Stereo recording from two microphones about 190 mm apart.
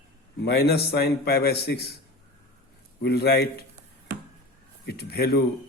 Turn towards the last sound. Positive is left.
turn(degrees=55)  # may be behind; listen again after turning